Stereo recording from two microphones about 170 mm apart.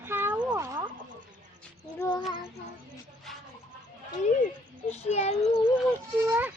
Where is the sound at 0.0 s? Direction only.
10° right (ahead or behind).